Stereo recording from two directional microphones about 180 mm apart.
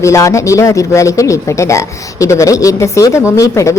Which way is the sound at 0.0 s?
15° left (ahead or behind).